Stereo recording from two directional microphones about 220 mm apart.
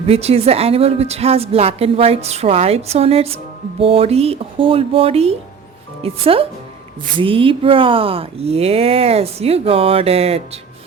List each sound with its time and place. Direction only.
0.1 s a woman's voice: 30° right (ahead or behind)